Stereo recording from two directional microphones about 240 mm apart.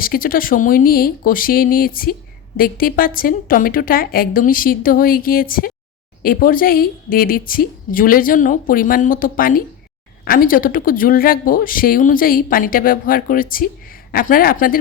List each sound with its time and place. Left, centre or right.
0.0 s a woman's voice: left